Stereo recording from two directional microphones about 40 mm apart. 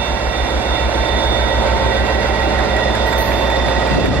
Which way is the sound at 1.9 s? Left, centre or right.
Right.